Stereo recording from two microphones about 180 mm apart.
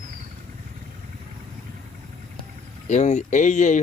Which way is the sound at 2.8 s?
40° left (ahead or behind).